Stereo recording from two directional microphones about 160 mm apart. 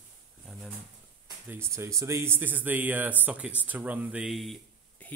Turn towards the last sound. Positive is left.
turn(degrees=5)  # may be behind; listen again after turning